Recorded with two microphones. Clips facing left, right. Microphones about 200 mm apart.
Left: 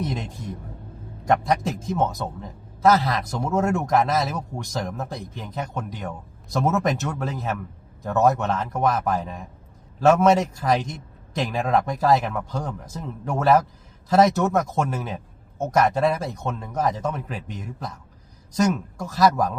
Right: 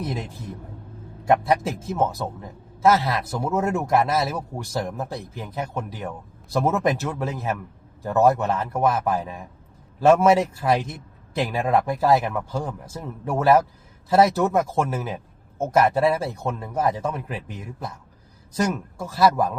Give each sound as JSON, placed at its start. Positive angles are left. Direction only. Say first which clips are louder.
{"t": 1.3, "sound": "a man's voice", "louder": "right 1 dB", "side_deg": -5}